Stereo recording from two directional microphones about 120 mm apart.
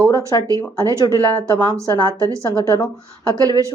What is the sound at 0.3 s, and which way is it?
Speech, 30° left (ahead or behind).